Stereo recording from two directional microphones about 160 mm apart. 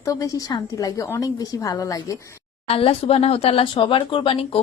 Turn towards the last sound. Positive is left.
turn(degrees=35)  # may be behind; listen again after turning